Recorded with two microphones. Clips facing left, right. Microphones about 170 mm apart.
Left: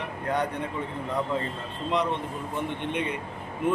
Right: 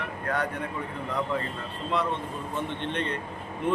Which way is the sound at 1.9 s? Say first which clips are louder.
Left 2 dB; 20° left (ahead or behind).